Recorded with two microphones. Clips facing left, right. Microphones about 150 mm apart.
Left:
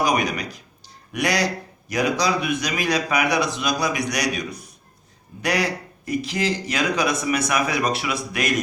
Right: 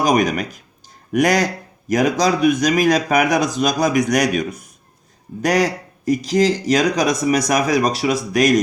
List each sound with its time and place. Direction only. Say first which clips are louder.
0.0 s speech: right 5 dB; 45° right (ahead or behind)